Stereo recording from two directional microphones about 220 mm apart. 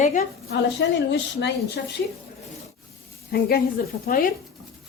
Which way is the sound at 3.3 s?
45° left (ahead or behind).